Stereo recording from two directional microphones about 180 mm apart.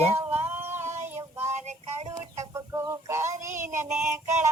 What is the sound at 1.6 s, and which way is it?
Music, 40° right (ahead or behind).